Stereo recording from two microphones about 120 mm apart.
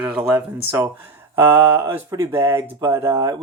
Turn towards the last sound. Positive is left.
turn(degrees=-35)  # may be behind; listen again after turning